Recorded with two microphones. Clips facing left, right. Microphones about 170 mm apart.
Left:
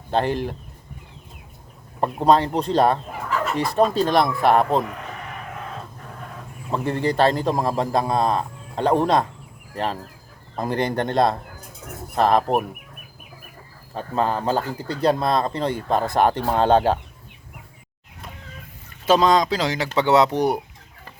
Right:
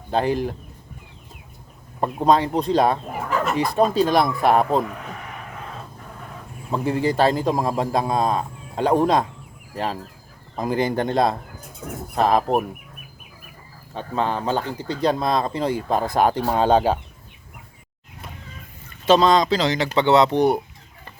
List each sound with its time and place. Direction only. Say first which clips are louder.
0.1 s speech: right 1 dB; 5° right (ahead or behind)
2.0 s speech: left 1 dB; centre (ahead or behind)
6.7 s speech: right 1 dB; 5° right (ahead or behind)
13.9 s speech: left 1 dB; centre (ahead or behind)
19.0 s speech: right 1 dB; 10° left (ahead or behind)